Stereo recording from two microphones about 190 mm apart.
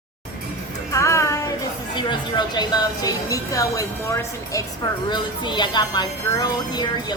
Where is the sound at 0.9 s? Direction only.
15° left (ahead or behind).